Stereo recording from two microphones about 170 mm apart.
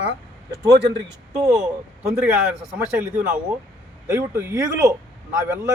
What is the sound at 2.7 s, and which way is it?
Speech, 10° right (ahead or behind).